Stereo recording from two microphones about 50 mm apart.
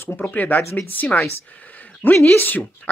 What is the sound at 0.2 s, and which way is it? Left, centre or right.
Speech, left.